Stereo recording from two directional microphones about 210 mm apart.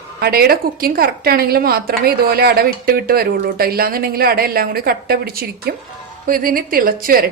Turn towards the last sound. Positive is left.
turn(degrees=-45)  # may be behind; listen again after turning